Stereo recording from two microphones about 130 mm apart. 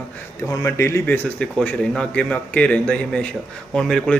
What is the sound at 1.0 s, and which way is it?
A man's voice, 10° left (ahead or behind).